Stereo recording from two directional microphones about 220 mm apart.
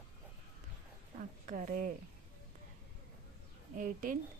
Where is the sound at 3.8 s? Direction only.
40° right (ahead or behind).